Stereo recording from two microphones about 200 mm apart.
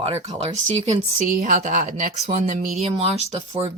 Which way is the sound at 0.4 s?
35° right (ahead or behind).